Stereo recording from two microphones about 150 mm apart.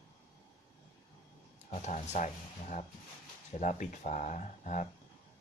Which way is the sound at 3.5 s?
55° left (ahead or behind).